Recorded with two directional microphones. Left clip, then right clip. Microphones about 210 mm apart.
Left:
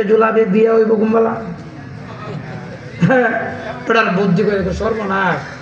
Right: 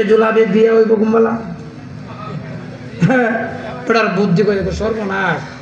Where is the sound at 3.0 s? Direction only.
55° right (ahead or behind).